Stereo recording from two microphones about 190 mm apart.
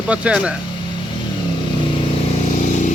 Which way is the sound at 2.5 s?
40° left (ahead or behind).